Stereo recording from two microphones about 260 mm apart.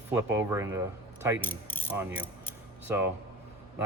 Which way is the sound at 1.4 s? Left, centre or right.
Centre.